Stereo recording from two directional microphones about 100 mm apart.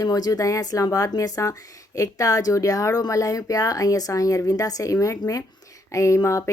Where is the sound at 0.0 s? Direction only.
35° left (ahead or behind).